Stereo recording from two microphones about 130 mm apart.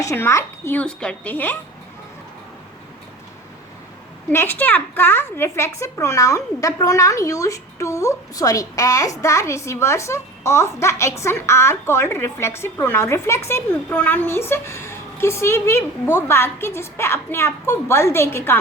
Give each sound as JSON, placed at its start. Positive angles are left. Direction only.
{"t": 0.0, "sound": "a woman's voice", "side_deg": 20}
{"t": 4.3, "sound": "a woman's voice", "side_deg": 15}